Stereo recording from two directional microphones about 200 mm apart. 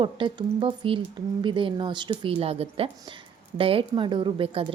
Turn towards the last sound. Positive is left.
turn(degrees=-25)  # may be behind; listen again after turning